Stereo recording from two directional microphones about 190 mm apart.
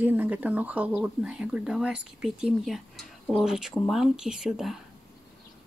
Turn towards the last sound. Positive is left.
turn(degrees=0)  # may be behind; listen again after turning